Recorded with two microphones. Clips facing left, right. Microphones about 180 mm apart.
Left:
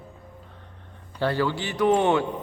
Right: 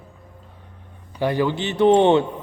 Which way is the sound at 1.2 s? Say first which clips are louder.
Right 3 dB; 15° right (ahead or behind).